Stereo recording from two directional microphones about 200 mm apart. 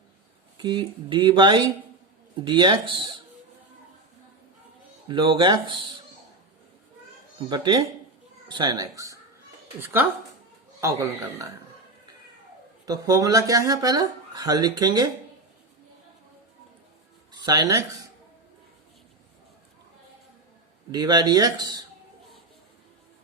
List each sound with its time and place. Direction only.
0.6 s speech: 20° right (ahead or behind)
5.0 s speech: 25° right (ahead or behind)
7.3 s a man's voice: 20° right (ahead or behind)
12.8 s speech: 20° right (ahead or behind)
17.4 s speech: 20° right (ahead or behind)
20.9 s speech: 20° right (ahead or behind)